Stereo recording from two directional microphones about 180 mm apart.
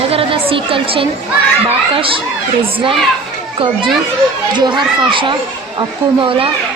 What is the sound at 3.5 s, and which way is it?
Speech, 30° right (ahead or behind).